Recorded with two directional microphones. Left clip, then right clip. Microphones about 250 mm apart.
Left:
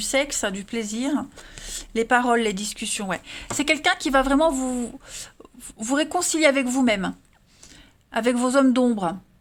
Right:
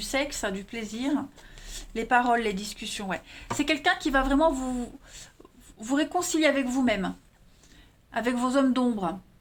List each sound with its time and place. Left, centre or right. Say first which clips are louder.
0.0 s speech: left 5 dB; left